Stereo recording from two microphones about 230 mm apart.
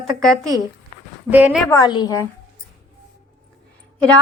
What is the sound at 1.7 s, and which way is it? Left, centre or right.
Speech, centre.